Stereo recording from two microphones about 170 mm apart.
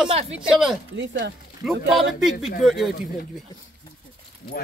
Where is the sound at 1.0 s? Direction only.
90° right.